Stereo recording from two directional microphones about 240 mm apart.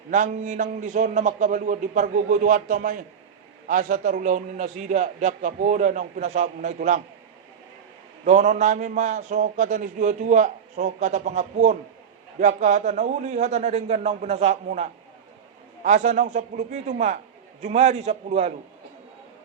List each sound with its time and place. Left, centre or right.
0.1 s a man's voice: right
8.2 s a man's voice: right